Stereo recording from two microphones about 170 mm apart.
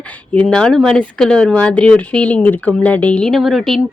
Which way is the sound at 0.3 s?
5° left (ahead or behind).